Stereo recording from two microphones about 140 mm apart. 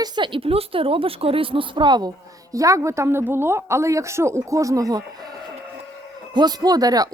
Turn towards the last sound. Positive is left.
turn(degrees=-25)  # may be behind; listen again after turning